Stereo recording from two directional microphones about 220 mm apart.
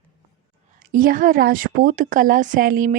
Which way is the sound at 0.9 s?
40° right (ahead or behind).